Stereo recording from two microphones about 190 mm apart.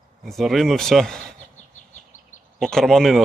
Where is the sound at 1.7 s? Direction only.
40° left (ahead or behind).